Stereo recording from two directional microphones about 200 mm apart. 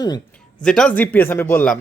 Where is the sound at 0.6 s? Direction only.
5° left (ahead or behind).